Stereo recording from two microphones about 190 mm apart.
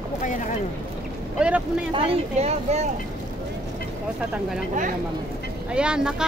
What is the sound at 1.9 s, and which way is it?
Speech, 30° right (ahead or behind).